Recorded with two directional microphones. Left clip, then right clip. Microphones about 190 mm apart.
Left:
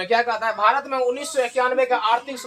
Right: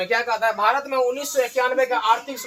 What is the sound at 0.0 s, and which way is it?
Speech, 50° left (ahead or behind).